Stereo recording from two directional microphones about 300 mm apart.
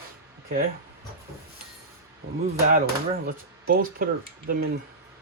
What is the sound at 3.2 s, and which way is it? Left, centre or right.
Speech, right.